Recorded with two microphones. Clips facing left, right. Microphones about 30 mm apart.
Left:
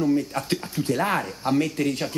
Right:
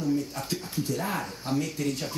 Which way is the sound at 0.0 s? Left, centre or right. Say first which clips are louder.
Left 6 dB; left.